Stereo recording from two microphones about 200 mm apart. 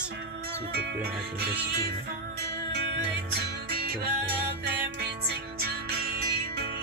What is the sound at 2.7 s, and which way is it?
Music, 55° right (ahead or behind).